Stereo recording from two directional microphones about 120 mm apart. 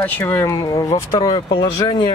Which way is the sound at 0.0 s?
15° left (ahead or behind).